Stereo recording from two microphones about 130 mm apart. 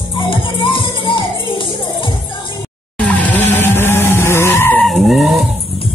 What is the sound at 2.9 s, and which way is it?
Skidding, 10° left (ahead or behind).